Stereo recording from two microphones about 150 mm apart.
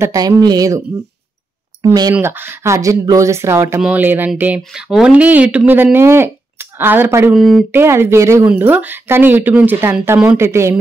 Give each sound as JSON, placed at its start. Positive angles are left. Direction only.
{"t": 0.0, "sound": "speech", "side_deg": -25}
{"t": 2.1, "sound": "speech", "side_deg": -15}
{"t": 7.3, "sound": "speech", "side_deg": 0}
{"t": 7.7, "sound": "speech", "side_deg": -15}